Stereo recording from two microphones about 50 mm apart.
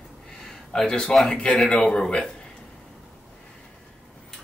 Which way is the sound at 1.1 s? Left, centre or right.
Centre.